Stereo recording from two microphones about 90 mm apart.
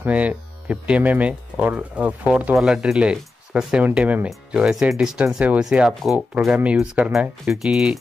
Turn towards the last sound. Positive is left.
turn(degrees=-5)  # may be behind; listen again after turning